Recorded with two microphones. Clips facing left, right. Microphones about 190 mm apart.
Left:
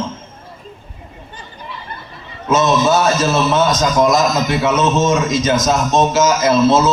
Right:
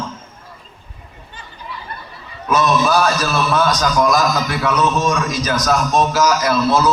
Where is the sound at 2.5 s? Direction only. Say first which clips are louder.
Left 2 dB; 25° left (ahead or behind).